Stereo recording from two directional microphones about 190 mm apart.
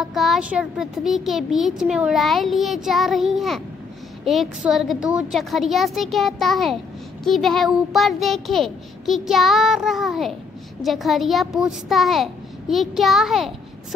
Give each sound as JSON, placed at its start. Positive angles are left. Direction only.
{"t": 0.0, "sound": "a child's voice", "side_deg": 0}